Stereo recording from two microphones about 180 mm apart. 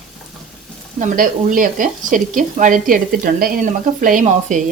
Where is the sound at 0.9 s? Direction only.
45° right (ahead or behind).